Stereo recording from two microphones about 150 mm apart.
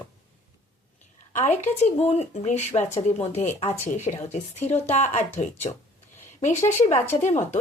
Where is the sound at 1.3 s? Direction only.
50° left (ahead or behind).